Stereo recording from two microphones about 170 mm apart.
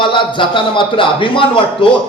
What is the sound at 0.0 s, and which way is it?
A man's voice, 30° left (ahead or behind).